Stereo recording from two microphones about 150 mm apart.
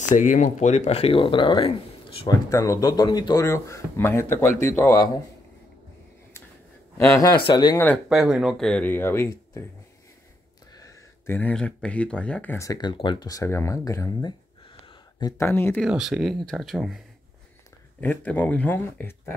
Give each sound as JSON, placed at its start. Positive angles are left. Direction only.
{"t": 0.1, "sound": "speech", "side_deg": 55}
{"t": 2.5, "sound": "speech", "side_deg": 20}
{"t": 7.1, "sound": "speech", "side_deg": 25}
{"t": 8.1, "sound": "speech", "side_deg": -5}
{"t": 10.8, "sound": "a sound", "side_deg": 25}
{"t": 11.3, "sound": "speech", "side_deg": 10}
{"t": 14.9, "sound": "a sound", "side_deg": 30}
{"t": 15.4, "sound": "speech", "side_deg": 15}
{"t": 15.8, "sound": "speech", "side_deg": 0}
{"t": 18.0, "sound": "speech", "side_deg": 10}